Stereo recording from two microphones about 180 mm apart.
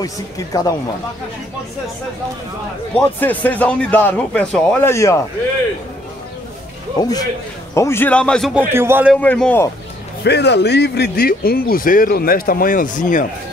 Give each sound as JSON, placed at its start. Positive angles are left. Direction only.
{"t": 0.0, "sound": "speech", "side_deg": 20}
{"t": 3.0, "sound": "speech", "side_deg": 10}
{"t": 4.9, "sound": "speech", "side_deg": 15}
{"t": 7.0, "sound": "speech", "side_deg": 20}
{"t": 8.5, "sound": "a man's voice", "side_deg": -10}
{"t": 9.1, "sound": "speech", "side_deg": 5}
{"t": 10.2, "sound": "speech", "side_deg": 70}